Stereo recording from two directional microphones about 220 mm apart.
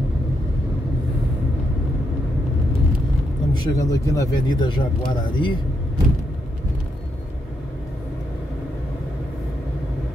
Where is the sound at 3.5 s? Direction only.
15° left (ahead or behind).